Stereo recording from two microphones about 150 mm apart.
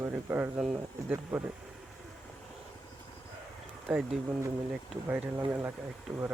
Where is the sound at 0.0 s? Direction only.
15° right (ahead or behind).